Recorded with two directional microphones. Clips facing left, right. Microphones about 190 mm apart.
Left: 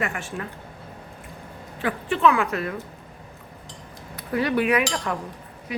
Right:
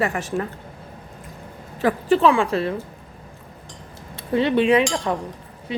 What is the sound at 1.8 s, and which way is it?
Speech, 35° right (ahead or behind).